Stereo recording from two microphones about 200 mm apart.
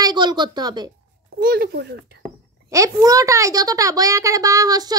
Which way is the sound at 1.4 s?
45° right (ahead or behind).